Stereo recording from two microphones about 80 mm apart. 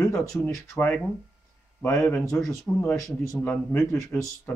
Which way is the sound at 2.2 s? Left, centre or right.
Left.